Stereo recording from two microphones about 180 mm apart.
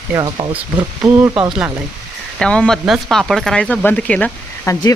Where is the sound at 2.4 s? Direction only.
5° left (ahead or behind).